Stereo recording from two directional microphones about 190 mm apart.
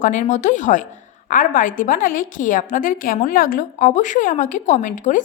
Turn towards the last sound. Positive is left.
turn(degrees=40)  # may be behind; listen again after turning